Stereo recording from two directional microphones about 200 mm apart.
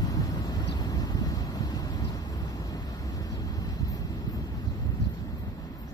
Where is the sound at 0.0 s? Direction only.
20° left (ahead or behind).